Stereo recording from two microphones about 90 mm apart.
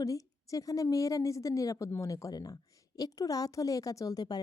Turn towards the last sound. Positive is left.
turn(degrees=45)  # may be behind; listen again after turning